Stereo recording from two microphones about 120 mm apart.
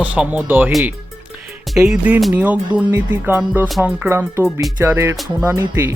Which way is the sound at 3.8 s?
20° right (ahead or behind).